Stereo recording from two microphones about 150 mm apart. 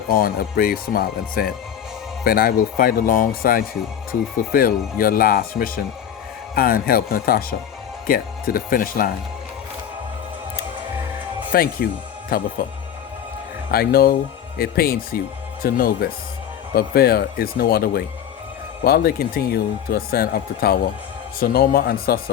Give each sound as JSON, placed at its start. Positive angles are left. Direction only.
{"t": 0.1, "sound": "speech", "side_deg": 75}
{"t": 11.5, "sound": "speech", "side_deg": 85}
{"t": 13.7, "sound": "speech", "side_deg": 90}